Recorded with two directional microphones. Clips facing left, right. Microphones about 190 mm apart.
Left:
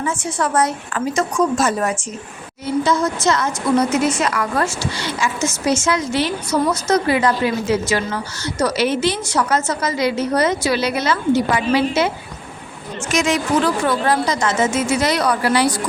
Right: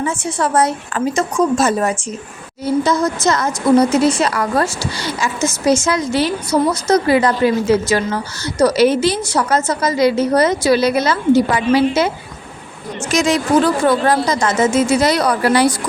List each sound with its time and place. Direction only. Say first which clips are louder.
0.0 s a woman's voice: right 2 dB; 30° right (ahead or behind)
2.8 s a woman's voice: left 1 dB; 40° right (ahead or behind)
13.1 s a woman's voice: right 3 dB; 35° right (ahead or behind)